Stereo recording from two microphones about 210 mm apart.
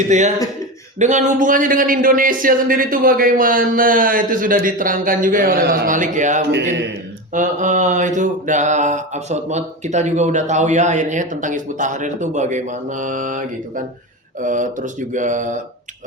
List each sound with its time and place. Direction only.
0.1 s mantra: 35° right (ahead or behind)